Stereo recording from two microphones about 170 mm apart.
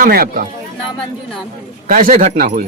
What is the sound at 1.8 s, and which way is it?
Speech, 55° right (ahead or behind).